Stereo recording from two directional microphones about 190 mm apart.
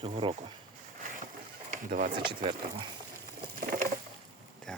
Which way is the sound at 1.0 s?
45° right (ahead or behind).